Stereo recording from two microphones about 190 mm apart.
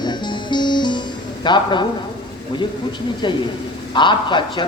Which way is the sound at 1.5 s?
25° left (ahead or behind).